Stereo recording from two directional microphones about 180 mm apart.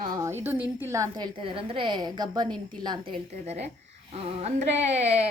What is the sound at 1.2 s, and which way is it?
A woman's voice, 30° right (ahead or behind).